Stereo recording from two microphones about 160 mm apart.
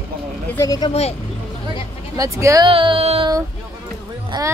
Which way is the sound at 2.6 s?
35° right (ahead or behind).